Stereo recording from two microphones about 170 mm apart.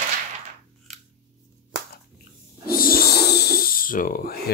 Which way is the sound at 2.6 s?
60° left (ahead or behind).